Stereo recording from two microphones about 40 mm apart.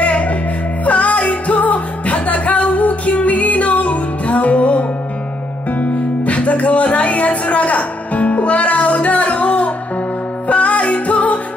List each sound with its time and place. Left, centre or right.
0.0 s music: left